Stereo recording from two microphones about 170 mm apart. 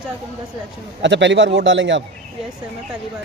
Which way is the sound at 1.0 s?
90° right.